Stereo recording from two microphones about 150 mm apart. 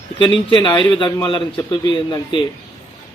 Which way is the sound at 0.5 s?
30° left (ahead or behind).